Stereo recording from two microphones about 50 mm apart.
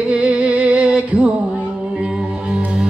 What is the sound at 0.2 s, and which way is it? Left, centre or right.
Music, right.